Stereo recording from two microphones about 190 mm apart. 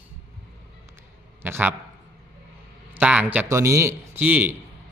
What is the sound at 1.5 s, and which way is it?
Speech, 10° right (ahead or behind).